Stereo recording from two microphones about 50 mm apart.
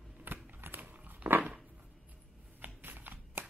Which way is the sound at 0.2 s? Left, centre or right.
Right.